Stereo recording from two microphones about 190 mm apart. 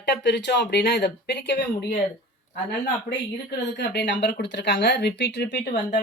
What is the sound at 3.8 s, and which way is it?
Speech, 65° left (ahead or behind).